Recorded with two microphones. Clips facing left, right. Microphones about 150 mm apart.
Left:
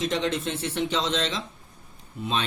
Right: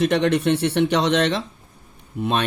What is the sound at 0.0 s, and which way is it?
Speech, 65° right (ahead or behind).